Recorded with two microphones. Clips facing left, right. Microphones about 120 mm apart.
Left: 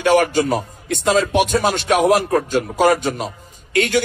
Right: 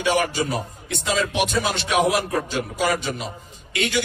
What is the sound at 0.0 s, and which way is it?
A man's voice, 50° left (ahead or behind).